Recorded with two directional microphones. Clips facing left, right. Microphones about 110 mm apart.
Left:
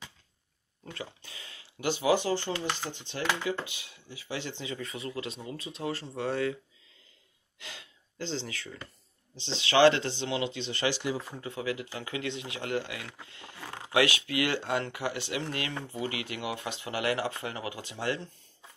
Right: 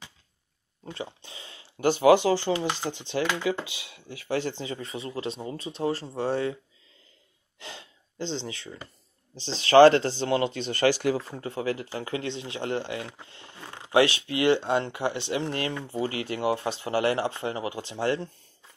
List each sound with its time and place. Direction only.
0.8 s a sound: 25° right (ahead or behind)
1.8 s speech: 50° right (ahead or behind)
2.0 s speech: 85° right; by 6.6 s 30° right (ahead or behind)
7.5 s gasp: 30° right (ahead or behind)
9.6 s speech: 45° right (ahead or behind)
11.3 s speech: 40° right (ahead or behind)